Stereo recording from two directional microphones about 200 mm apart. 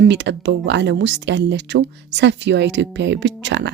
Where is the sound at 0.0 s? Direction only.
60° right (ahead or behind).